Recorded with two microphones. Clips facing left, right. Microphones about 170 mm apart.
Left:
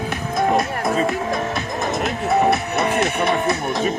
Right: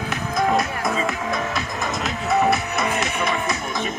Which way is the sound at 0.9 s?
40° left (ahead or behind).